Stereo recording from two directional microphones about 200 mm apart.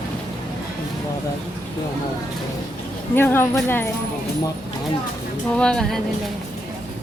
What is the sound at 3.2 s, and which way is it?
Speech, 10° left (ahead or behind).